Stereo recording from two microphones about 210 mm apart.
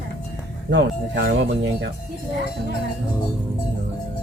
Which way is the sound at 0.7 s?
55° right (ahead or behind).